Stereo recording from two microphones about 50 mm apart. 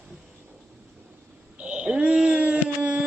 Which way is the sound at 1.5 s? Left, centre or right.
Right.